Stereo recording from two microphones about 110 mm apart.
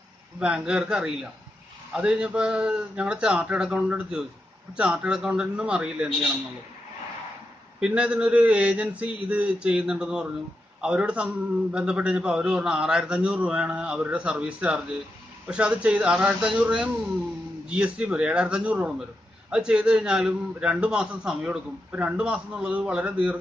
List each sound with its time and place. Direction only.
0.4 s a man's voice: 10° right (ahead or behind)
7.8 s a man's voice: 10° right (ahead or behind)